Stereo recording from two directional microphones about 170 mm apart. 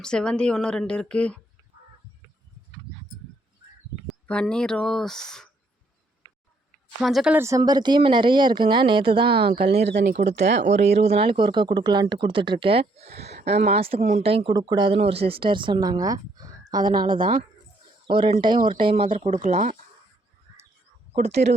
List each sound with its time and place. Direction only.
0.0 s a woman's voice: 5° left (ahead or behind)
4.3 s a woman's voice: 5° left (ahead or behind)
7.0 s a woman's voice: centre (ahead or behind)
7.3 s speech: 15° right (ahead or behind)
10.2 s speech: 40° right (ahead or behind)
10.4 s speech: 90° right
10.7 s speech: 40° right (ahead or behind)
19.1 s speech: 45° right (ahead or behind)
21.2 s speech: 40° right (ahead or behind)